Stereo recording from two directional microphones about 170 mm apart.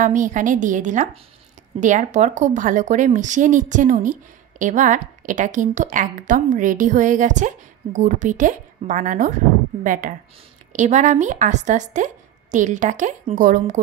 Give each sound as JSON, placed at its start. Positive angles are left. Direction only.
{"t": 0.0, "sound": "a woman's voice", "side_deg": -50}